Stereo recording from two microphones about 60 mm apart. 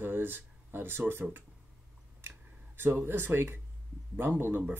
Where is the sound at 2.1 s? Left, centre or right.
Right.